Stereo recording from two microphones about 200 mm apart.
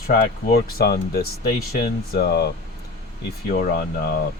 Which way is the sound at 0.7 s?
50° left (ahead or behind).